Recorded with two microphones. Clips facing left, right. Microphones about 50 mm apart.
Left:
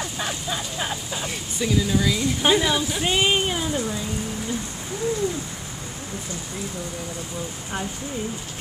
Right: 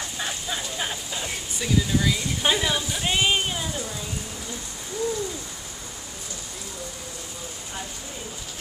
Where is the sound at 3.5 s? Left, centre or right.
Centre.